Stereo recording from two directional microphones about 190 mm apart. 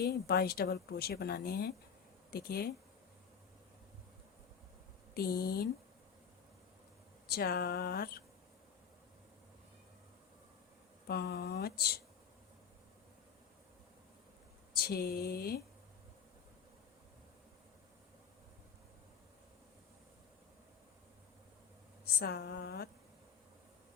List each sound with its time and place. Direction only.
0.0 s speech: 55° left (ahead or behind)
5.1 s speech: 55° left (ahead or behind)
7.3 s speech: 55° left (ahead or behind)
11.1 s speech: 55° left (ahead or behind)
14.8 s speech: 55° left (ahead or behind)
22.2 s speech: 55° left (ahead or behind)